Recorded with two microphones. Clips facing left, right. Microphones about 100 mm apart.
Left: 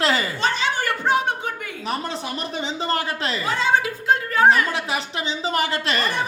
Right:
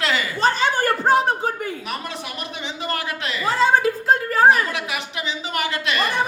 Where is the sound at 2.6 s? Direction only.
30° left (ahead or behind).